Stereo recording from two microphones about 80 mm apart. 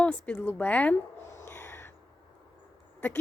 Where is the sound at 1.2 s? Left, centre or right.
Left.